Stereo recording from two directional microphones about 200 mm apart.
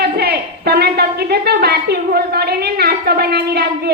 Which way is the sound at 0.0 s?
50° right (ahead or behind).